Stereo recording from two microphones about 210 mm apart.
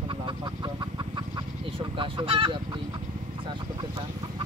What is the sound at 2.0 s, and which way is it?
Speech, 25° right (ahead or behind).